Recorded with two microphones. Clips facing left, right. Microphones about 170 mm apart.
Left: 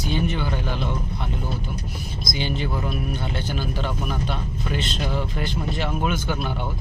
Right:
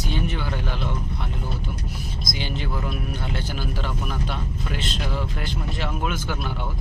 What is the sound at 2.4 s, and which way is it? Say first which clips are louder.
Speech: left 4 dB; centre (ahead or behind).